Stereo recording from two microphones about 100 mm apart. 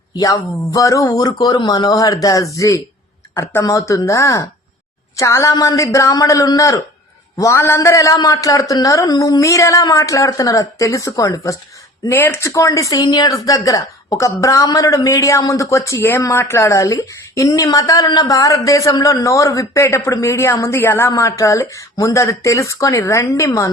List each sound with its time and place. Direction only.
0.1 s a woman's voice: 40° left (ahead or behind)